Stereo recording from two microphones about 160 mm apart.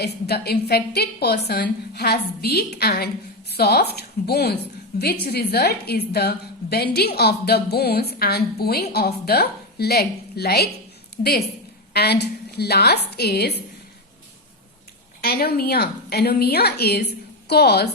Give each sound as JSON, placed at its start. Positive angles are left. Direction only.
{"t": 0.0, "sound": "a woman's voice", "side_deg": 90}
{"t": 11.9, "sound": "a woman's voice", "side_deg": 90}
{"t": 15.2, "sound": "a woman's voice", "side_deg": 75}